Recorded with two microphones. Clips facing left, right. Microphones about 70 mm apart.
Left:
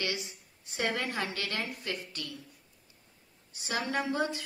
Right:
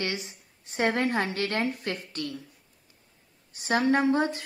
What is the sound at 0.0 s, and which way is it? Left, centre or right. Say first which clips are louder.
Speech: right 3 dB; right.